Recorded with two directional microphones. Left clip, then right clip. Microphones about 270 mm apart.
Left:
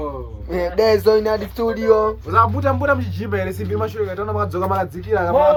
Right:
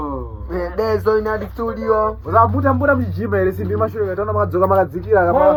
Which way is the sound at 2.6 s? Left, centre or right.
Centre.